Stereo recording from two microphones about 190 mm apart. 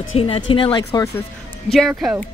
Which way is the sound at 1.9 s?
5° right (ahead or behind).